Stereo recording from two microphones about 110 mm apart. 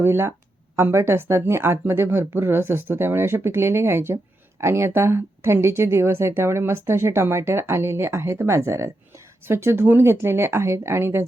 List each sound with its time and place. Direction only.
0.0 s speech: 20° right (ahead or behind)